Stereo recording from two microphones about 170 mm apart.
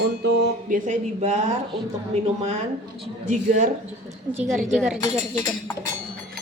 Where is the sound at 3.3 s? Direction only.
45° right (ahead or behind).